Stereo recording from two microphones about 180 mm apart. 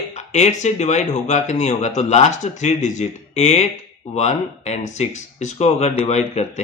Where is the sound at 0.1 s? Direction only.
40° left (ahead or behind).